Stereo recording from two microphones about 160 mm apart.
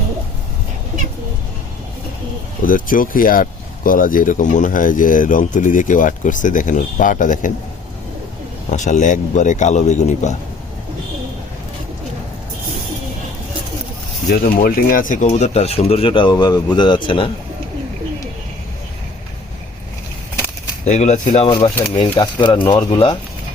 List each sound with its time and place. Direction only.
2.6 s speech: 60° left (ahead or behind)
8.7 s speech: 50° left (ahead or behind)
14.3 s a man's voice: 60° left (ahead or behind); by 17.2 s 30° left (ahead or behind)
20.8 s speech: 45° left (ahead or behind)
21.4 s a man's voice: 30° left (ahead or behind)